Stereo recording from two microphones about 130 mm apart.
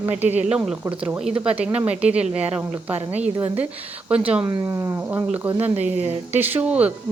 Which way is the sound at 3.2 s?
10° right (ahead or behind).